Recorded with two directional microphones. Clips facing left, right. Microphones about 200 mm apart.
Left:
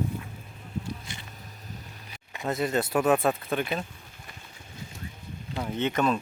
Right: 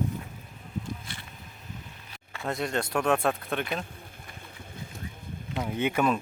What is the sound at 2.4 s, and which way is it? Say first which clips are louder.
Speech: left 3 dB; centre (ahead or behind).